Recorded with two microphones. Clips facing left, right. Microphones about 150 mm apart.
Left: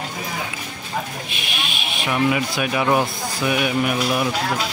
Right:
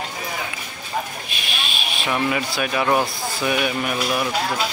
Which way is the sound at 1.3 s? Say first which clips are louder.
Left 1 dB; 20° left (ahead or behind).